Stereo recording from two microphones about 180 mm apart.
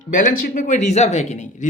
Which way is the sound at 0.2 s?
50° left (ahead or behind).